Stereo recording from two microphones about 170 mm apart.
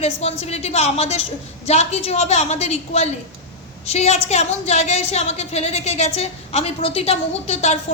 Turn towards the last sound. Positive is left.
turn(degrees=40)  # may be behind; listen again after turning